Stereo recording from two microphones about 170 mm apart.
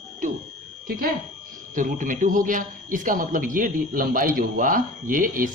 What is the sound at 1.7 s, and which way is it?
A man's voice, 50° right (ahead or behind).